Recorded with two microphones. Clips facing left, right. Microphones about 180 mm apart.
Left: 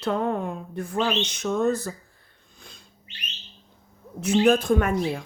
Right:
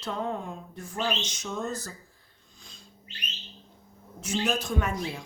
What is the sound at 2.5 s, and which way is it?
Cat, 60° left (ahead or behind).